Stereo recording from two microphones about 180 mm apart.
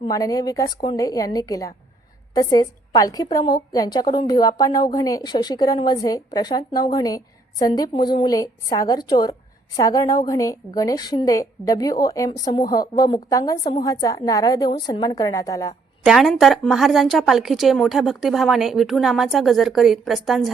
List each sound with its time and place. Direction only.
0.0 s a woman's voice: 20° left (ahead or behind)
16.0 s a woman's voice: centre (ahead or behind)